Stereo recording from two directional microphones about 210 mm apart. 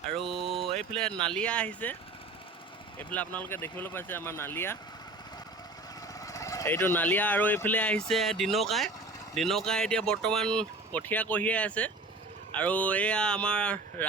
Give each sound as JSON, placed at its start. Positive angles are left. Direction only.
{"t": 0.2, "sound": "a sound", "side_deg": 0}
{"t": 0.5, "sound": "mantra", "side_deg": 0}
{"t": 1.3, "sound": "speech", "side_deg": 5}
{"t": 3.0, "sound": "speech", "side_deg": 5}
{"t": 6.1, "sound": "speech", "side_deg": 15}